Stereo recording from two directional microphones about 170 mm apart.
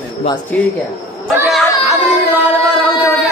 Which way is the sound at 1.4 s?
Centre (ahead or behind).